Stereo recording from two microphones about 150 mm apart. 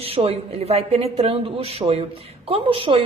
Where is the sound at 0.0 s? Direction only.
40° right (ahead or behind).